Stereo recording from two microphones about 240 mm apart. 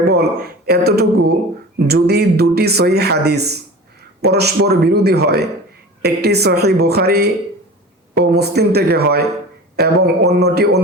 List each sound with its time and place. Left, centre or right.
0.0 s a woman's voice: right